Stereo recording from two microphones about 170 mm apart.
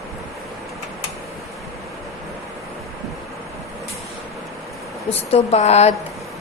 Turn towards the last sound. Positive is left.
turn(degrees=40)  # may be behind; listen again after turning